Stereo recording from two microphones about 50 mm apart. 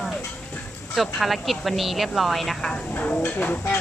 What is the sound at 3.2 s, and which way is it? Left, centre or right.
Speech, left.